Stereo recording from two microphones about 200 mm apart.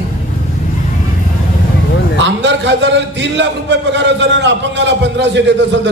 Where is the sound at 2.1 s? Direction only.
65° right (ahead or behind).